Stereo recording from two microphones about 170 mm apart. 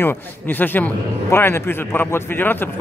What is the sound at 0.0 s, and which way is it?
A man's voice, 10° left (ahead or behind).